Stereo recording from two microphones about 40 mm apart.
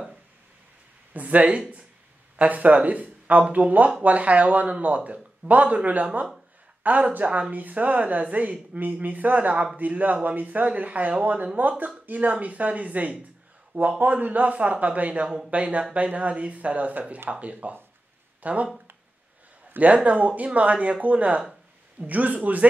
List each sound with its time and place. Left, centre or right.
1.1 s speech: right
19.7 s speech: right
20.1 s speech: right